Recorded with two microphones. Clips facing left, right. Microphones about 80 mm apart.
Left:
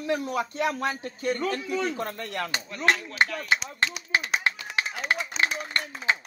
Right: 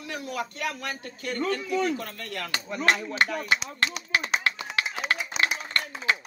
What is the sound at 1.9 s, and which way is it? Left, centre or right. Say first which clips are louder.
Speech: left 3 dB; left.